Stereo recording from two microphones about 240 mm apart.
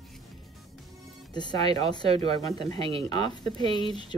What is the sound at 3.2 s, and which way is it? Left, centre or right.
Speech, centre.